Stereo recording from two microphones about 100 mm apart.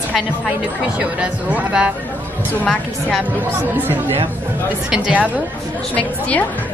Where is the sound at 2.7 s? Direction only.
5° left (ahead or behind).